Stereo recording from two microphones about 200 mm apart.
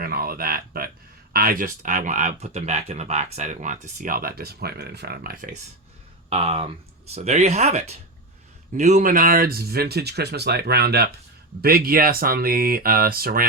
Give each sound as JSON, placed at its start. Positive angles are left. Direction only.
{"t": 0.0, "sound": "a sound", "side_deg": -50}
{"t": 1.3, "sound": "speech", "side_deg": -45}
{"t": 6.3, "sound": "speech", "side_deg": -30}